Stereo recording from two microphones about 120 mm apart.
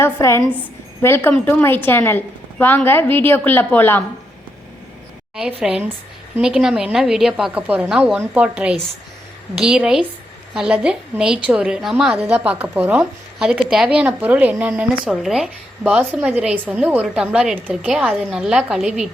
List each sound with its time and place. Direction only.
0.0 s a woman's voice: 20° left (ahead or behind)
5.4 s a woman's voice: 10° right (ahead or behind)